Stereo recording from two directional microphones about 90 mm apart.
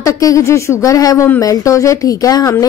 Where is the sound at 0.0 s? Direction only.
40° left (ahead or behind).